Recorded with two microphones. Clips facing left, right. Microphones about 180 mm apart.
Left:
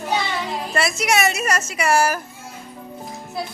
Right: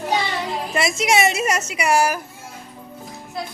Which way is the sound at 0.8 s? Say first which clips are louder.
Right 1 dB; 25° right (ahead or behind).